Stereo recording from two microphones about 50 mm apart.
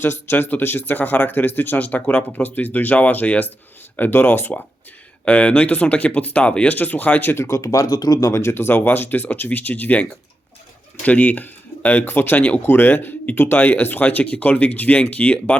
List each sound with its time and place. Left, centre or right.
0.0 s speech: left
5.2 s speech: left
6.7 s speech: left
7.4 s speech: left
8.8 s speech: left